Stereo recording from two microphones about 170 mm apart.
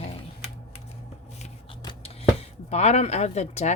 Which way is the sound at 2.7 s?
40° left (ahead or behind).